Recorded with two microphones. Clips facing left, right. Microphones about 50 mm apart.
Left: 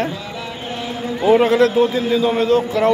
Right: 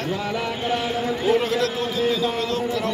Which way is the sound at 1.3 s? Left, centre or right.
Left.